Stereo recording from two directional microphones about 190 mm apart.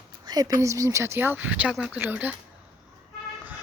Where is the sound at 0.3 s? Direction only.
20° right (ahead or behind).